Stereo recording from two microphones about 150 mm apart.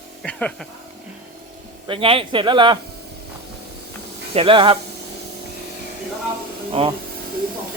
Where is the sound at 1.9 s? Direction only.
35° right (ahead or behind).